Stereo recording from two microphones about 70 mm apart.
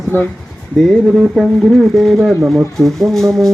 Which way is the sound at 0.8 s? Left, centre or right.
Centre.